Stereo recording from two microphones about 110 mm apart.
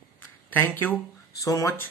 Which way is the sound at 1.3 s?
30° left (ahead or behind).